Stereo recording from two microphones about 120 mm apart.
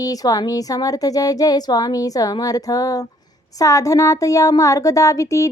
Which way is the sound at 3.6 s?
25° left (ahead or behind).